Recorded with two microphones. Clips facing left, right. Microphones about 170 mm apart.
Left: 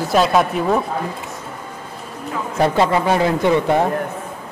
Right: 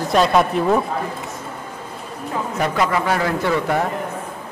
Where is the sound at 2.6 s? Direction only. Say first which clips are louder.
Left 5 dB; 25° left (ahead or behind).